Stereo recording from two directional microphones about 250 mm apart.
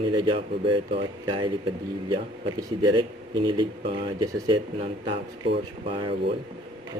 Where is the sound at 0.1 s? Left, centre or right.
Centre.